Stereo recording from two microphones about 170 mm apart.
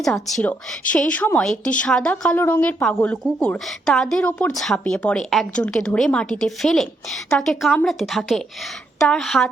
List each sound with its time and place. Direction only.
0.0 s a woman's voice: centre (ahead or behind)